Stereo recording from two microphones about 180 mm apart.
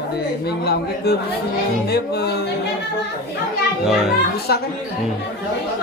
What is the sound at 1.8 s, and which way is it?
Music, 65° left (ahead or behind).